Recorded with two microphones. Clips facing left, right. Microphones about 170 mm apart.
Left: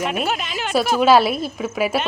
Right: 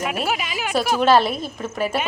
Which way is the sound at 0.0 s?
5° right (ahead or behind).